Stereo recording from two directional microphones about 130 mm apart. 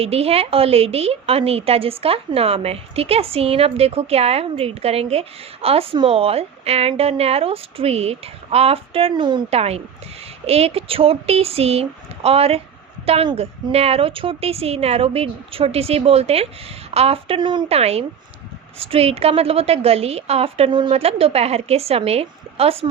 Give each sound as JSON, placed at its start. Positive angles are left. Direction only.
{"t": 0.0, "sound": "a woman's voice", "side_deg": -50}
{"t": 9.5, "sound": "a woman's voice", "side_deg": -50}
{"t": 17.7, "sound": "a woman's voice", "side_deg": -50}
{"t": 20.9, "sound": "a woman's voice", "side_deg": -50}